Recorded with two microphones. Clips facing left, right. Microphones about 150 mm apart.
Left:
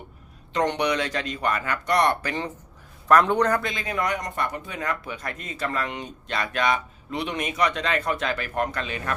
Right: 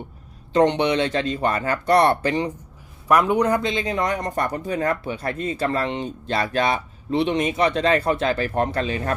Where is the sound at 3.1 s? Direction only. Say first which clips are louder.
Right 1 dB; 10° right (ahead or behind).